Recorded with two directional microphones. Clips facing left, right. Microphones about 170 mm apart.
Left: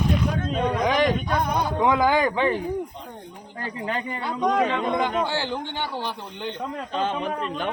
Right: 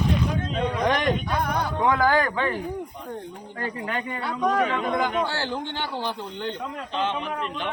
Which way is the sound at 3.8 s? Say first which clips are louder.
Left 4 dB; 25° left (ahead or behind).